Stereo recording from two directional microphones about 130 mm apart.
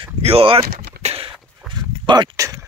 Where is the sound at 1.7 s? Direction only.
35° right (ahead or behind).